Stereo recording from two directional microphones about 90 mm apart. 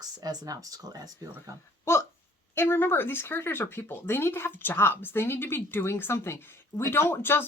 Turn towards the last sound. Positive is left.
turn(degrees=25)  # may be behind; listen again after turning